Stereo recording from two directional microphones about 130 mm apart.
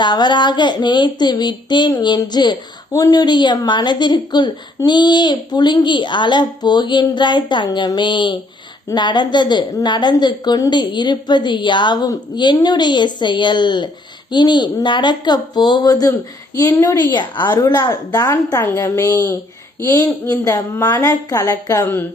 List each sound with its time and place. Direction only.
0.0 s a woman's voice: 35° left (ahead or behind)